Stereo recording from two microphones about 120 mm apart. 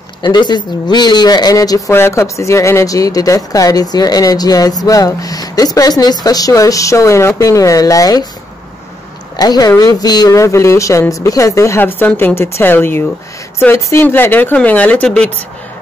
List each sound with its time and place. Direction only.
0.2 s speech: 40° left (ahead or behind)
1.9 s speech: 20° left (ahead or behind)
9.4 s speech: 30° left (ahead or behind); by 15.3 s 10° left (ahead or behind)